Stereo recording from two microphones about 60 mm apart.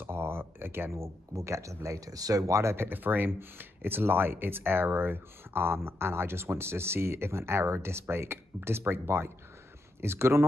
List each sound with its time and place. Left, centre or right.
0.0 s speech: right